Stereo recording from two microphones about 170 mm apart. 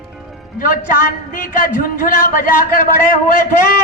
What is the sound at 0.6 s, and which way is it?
A man's voice, 55° left (ahead or behind).